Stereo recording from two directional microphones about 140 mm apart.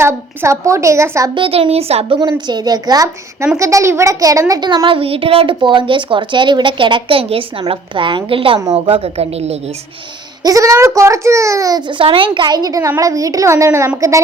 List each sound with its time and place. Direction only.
0.0 s a child's voice: 20° right (ahead or behind)
1.4 s a woman's voice: 40° right (ahead or behind)
2.5 s a child's voice: 30° right (ahead or behind); by 9.7 s 50° right (ahead or behind)
10.4 s a child's voice: 25° right (ahead or behind)